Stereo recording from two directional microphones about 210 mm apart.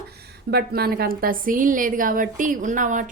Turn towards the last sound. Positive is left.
turn(degrees=-35)  # may be behind; listen again after turning